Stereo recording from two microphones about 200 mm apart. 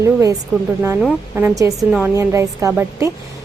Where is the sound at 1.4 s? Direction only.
10° right (ahead or behind).